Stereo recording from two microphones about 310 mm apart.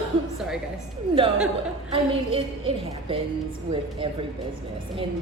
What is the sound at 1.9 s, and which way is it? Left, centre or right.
A woman's voice, centre.